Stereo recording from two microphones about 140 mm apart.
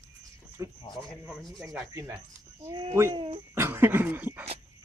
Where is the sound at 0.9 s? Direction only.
Centre (ahead or behind).